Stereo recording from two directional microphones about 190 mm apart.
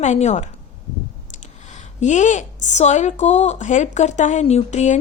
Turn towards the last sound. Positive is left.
turn(degrees=35)  # may be behind; listen again after turning